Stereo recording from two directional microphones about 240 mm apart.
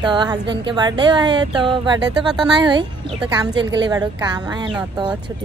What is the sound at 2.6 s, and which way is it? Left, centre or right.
A woman's voice, centre.